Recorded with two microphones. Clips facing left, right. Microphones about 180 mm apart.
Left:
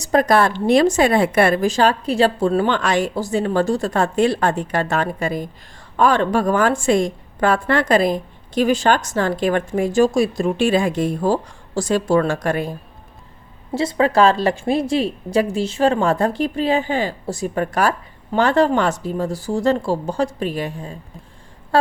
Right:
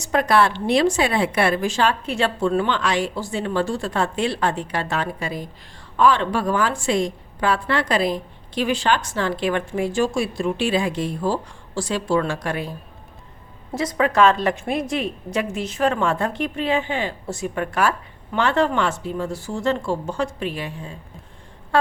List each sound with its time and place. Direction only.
0.0 s a woman's voice: 40° left (ahead or behind)
13.7 s a woman's voice: 30° left (ahead or behind)